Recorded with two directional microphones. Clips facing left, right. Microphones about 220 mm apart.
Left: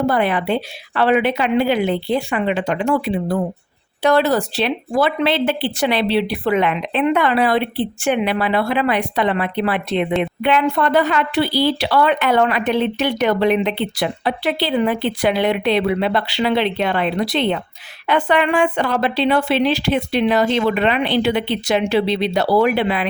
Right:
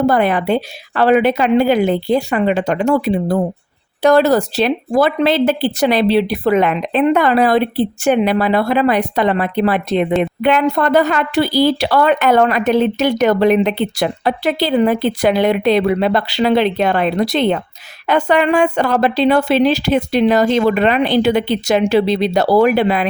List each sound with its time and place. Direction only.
0.0 s a woman's voice: 45° right (ahead or behind)